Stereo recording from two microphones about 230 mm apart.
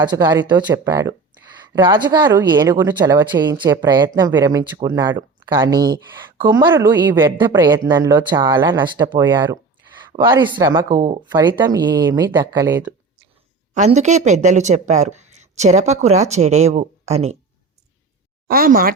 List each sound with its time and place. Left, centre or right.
0.0 s speech: centre
13.7 s speech: right
18.4 s speech: right